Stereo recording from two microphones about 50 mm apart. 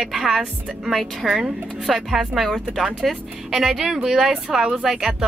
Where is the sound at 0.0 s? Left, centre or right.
Centre.